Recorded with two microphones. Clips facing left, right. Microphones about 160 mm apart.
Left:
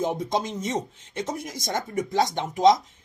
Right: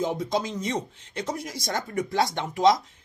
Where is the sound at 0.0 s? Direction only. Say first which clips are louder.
Left 1 dB; 50° left (ahead or behind).